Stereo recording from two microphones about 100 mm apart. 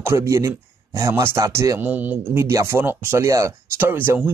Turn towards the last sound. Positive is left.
turn(degrees=-20)  # may be behind; listen again after turning